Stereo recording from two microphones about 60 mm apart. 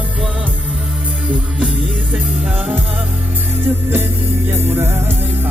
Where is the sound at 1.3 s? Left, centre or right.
Right.